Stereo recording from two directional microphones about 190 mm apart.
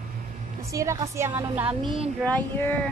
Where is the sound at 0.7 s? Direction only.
15° right (ahead or behind).